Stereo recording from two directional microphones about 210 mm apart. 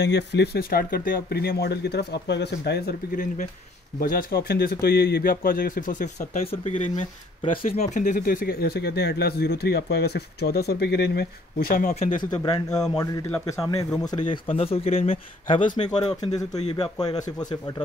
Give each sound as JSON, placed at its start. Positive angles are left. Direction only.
{"t": 0.0, "sound": "speech", "side_deg": 55}
{"t": 7.5, "sound": "speech", "side_deg": 30}
{"t": 12.0, "sound": "speech", "side_deg": 20}